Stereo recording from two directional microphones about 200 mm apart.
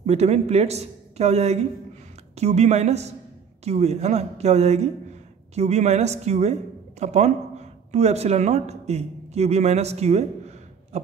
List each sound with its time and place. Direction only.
0.0 s speech: 35° right (ahead or behind)